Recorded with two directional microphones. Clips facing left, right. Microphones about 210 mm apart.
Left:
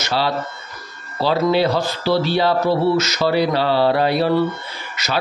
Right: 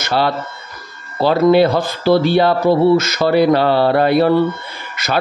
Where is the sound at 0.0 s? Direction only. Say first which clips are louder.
Right 3 dB; 55° right (ahead or behind).